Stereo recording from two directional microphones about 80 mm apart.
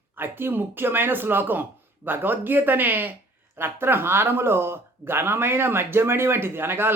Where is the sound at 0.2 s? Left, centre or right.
Right.